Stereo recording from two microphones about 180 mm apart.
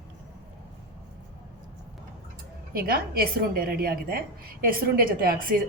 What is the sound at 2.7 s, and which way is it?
A woman's voice, 55° right (ahead or behind).